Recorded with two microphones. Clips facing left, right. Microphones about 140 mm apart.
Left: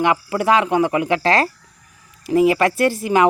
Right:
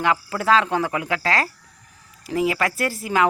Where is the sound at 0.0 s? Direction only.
20° left (ahead or behind).